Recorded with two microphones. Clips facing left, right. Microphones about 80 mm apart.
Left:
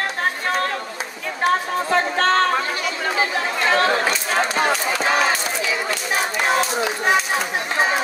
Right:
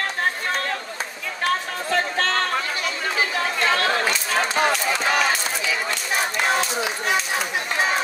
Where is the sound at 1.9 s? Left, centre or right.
Left.